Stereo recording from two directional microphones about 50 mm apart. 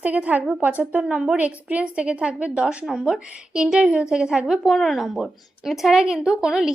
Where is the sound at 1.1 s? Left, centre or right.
Centre.